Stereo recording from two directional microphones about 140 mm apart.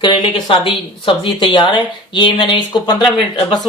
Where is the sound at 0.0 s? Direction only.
35° left (ahead or behind).